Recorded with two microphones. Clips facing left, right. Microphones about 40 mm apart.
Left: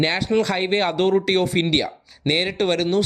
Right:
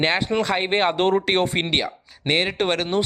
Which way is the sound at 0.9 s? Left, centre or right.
Right.